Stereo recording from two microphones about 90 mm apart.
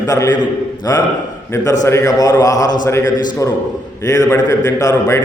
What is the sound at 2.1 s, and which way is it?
A man's voice, 45° left (ahead or behind).